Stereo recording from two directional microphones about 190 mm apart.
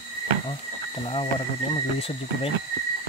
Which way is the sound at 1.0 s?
30° left (ahead or behind).